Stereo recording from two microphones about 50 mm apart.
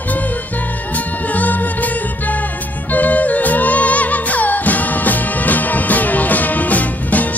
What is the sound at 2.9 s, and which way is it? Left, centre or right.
Music, left.